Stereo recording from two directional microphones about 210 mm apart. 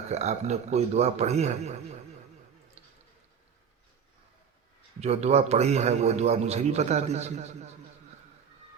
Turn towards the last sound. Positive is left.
turn(degrees=-30)  # may be behind; listen again after turning